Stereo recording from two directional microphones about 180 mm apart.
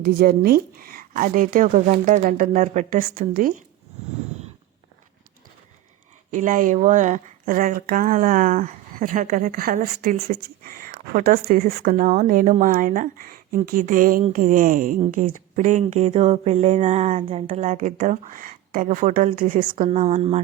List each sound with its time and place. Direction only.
0.0 s a woman's voice: 55° right (ahead or behind)
6.3 s a woman's voice: 50° right (ahead or behind)
10.2 s speech: 35° right (ahead or behind)
10.6 s a woman's voice: 50° right (ahead or behind)
19.9 s speech: 35° right (ahead or behind)